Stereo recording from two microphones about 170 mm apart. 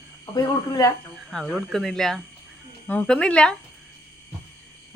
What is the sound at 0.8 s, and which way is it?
Speech, 20° left (ahead or behind).